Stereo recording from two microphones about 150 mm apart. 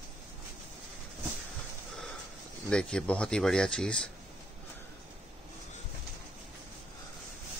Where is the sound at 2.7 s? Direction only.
5° left (ahead or behind).